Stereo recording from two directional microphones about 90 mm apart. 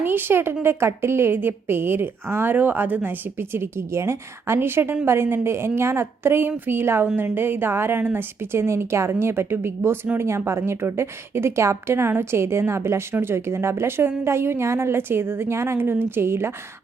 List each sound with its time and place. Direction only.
0.0 s a woman's voice: 25° right (ahead or behind)